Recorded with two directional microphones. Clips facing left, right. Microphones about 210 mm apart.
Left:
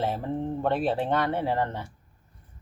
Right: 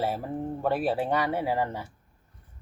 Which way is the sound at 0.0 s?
10° right (ahead or behind).